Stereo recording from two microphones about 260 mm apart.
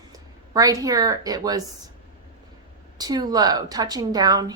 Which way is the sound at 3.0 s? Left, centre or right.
Centre.